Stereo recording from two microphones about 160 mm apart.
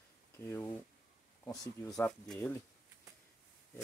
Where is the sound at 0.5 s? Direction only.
15° left (ahead or behind).